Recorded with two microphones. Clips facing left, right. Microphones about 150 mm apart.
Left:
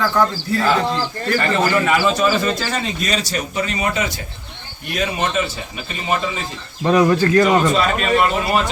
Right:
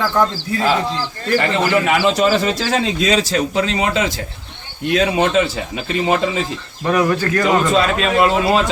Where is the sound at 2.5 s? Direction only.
90° right.